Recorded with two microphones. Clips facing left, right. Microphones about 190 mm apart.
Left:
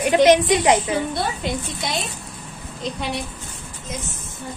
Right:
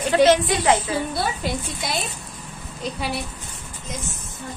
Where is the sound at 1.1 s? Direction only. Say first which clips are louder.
Left 1 dB; 5° right (ahead or behind).